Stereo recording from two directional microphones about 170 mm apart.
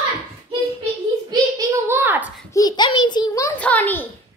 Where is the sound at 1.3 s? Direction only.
20° right (ahead or behind).